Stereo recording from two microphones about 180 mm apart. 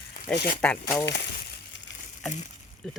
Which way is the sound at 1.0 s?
75° left (ahead or behind).